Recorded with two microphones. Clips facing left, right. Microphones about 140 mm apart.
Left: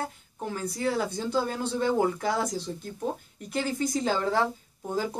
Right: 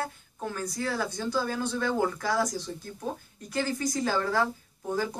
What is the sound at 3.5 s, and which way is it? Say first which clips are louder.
Speech: left 1 dB; 20° left (ahead or behind).